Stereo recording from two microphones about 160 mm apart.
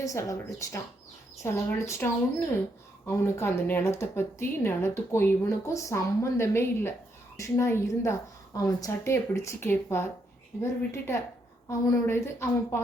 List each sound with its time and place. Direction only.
0.0 s speech: 20° left (ahead or behind)
3.1 s speech: 15° left (ahead or behind)